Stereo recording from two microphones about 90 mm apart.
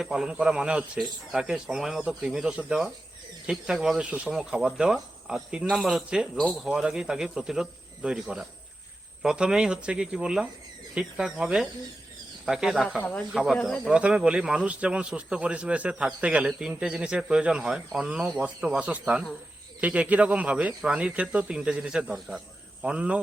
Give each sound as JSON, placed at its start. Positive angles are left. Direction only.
{"t": 0.0, "sound": "speech", "side_deg": -5}
{"t": 13.0, "sound": "speech", "side_deg": 15}
{"t": 13.3, "sound": "speech", "side_deg": -5}
{"t": 13.6, "sound": "speech", "side_deg": 15}
{"t": 13.8, "sound": "speech", "side_deg": -5}